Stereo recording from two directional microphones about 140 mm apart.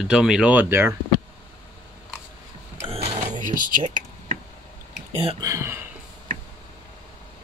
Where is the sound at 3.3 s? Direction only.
70° right (ahead or behind).